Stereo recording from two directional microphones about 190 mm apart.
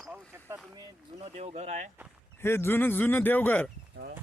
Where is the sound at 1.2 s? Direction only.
35° right (ahead or behind).